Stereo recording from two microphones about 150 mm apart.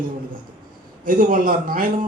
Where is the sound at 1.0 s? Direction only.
70° right (ahead or behind).